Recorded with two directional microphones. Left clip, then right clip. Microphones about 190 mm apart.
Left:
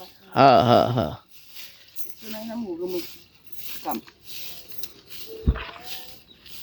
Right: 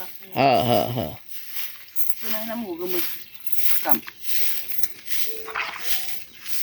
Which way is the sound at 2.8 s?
15° right (ahead or behind).